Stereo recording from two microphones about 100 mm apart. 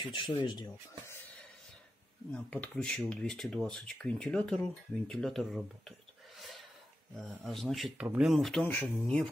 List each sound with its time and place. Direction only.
0.1 s speech: 50° left (ahead or behind)
2.3 s speech: 10° left (ahead or behind)
8.6 s speech: 15° left (ahead or behind)